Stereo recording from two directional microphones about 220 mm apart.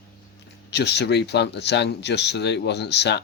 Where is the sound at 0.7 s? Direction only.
50° left (ahead or behind).